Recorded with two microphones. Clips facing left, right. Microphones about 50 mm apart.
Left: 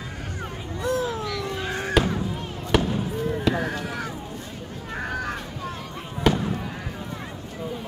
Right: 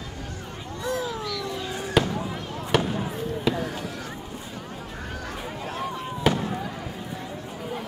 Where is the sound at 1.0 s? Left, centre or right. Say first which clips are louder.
Left 2 dB; left.